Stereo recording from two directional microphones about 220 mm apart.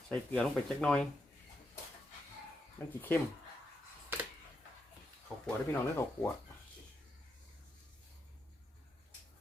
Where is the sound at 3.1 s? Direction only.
5° left (ahead or behind).